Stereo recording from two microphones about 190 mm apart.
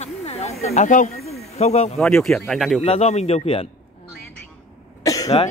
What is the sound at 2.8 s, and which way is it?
Speech, 35° left (ahead or behind).